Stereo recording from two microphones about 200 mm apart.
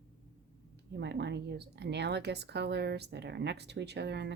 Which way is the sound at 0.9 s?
60° right (ahead or behind).